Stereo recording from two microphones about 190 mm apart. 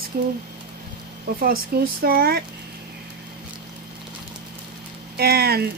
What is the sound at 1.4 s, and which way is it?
Speech, 50° right (ahead or behind).